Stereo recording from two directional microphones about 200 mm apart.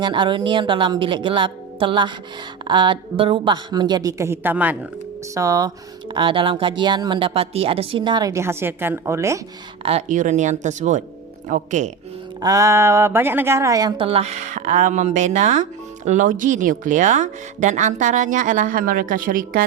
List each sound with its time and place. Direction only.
0.0 s speech: 25° right (ahead or behind)
9.8 s speech: 35° right (ahead or behind)
12.4 s speech: 15° right (ahead or behind); by 19.6 s 45° right (ahead or behind)